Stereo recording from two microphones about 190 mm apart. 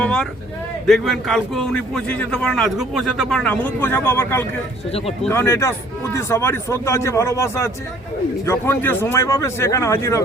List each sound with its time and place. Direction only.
0.0 s a sound: 5° left (ahead or behind)
0.9 s a man's voice: centre (ahead or behind)
4.9 s speech: 30° left (ahead or behind)
5.3 s a man's voice: 15° left (ahead or behind)